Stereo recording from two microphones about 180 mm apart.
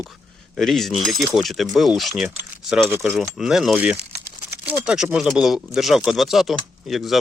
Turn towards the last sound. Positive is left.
turn(degrees=0)  # may be behind; listen again after turning